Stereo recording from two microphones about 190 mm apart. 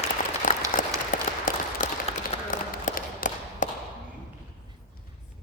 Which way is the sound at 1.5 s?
40° left (ahead or behind).